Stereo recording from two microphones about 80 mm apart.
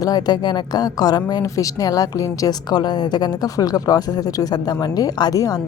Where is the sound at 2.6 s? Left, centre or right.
Left.